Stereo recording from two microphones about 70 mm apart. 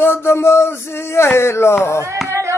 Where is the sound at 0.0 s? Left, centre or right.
Left.